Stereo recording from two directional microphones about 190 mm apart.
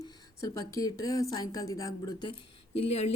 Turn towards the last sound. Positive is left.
turn(degrees=35)  # may be behind; listen again after turning